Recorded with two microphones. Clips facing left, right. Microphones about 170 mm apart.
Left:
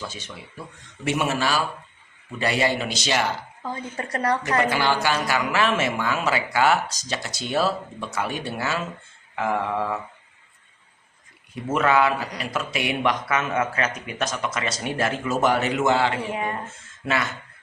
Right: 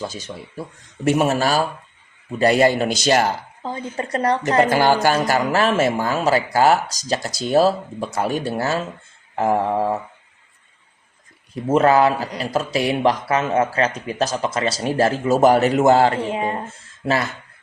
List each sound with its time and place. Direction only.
0.0 s a man's voice: 35° right (ahead or behind)
3.6 s speech: 25° right (ahead or behind)
4.4 s a man's voice: 45° right (ahead or behind)
11.5 s a man's voice: 35° right (ahead or behind)
16.2 s speech: 25° right (ahead or behind)